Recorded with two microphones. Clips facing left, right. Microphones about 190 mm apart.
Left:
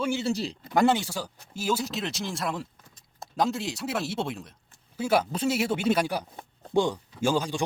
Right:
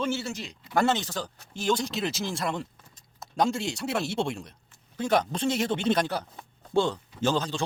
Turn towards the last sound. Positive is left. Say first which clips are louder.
# left 1 dB
turn(degrees=10)  # may be behind; listen again after turning